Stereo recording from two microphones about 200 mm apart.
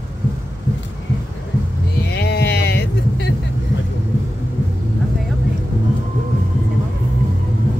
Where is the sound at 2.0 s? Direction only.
55° left (ahead or behind).